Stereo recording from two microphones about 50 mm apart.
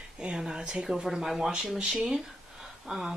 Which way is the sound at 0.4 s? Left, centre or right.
Centre.